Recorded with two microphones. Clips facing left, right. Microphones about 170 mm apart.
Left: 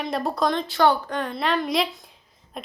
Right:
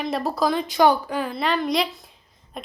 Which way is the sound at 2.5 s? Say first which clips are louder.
Even; centre (ahead or behind).